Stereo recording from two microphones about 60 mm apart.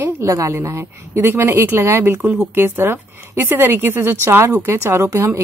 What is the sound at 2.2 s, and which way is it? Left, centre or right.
Speech, right.